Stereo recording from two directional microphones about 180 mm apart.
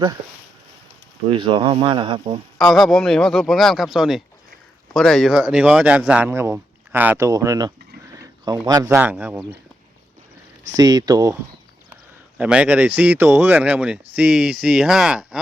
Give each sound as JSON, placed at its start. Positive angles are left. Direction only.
{"t": 1.3, "sound": "speech", "side_deg": -30}
{"t": 2.6, "sound": "speech", "side_deg": 0}
{"t": 10.8, "sound": "speech", "side_deg": -20}
{"t": 12.4, "sound": "speech", "side_deg": -5}